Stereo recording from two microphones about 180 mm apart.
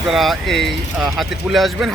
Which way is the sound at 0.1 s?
Centre (ahead or behind).